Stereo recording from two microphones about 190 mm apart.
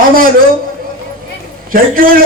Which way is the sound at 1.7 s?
50° right (ahead or behind).